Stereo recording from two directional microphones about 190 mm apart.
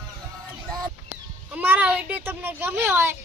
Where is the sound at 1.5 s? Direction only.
10° right (ahead or behind).